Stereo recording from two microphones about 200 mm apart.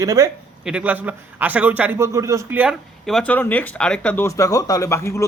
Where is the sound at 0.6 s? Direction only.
5° right (ahead or behind).